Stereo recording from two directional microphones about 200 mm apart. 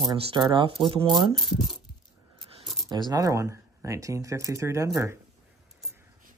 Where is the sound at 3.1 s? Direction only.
15° right (ahead or behind).